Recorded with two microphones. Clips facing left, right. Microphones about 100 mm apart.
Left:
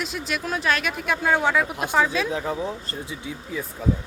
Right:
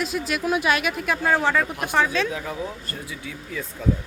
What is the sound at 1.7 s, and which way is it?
Speech, 20° left (ahead or behind).